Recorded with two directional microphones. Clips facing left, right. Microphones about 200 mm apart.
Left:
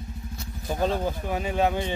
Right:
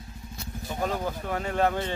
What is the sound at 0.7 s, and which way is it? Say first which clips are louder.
Speech: left 4 dB; 25° left (ahead or behind).